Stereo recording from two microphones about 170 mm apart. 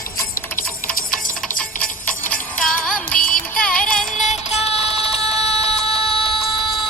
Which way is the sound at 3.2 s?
55° left (ahead or behind).